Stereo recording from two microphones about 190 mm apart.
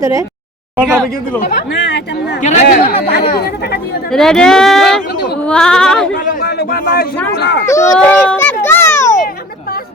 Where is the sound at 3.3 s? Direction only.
55° left (ahead or behind).